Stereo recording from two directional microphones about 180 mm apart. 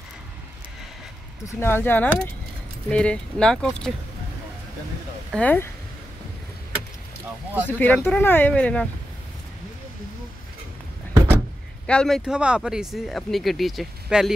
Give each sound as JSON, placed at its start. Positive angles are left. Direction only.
{"t": 1.6, "sound": "speech", "side_deg": 10}
{"t": 5.3, "sound": "speech", "side_deg": 10}
{"t": 7.6, "sound": "speech", "side_deg": 10}
{"t": 11.8, "sound": "speech", "side_deg": 5}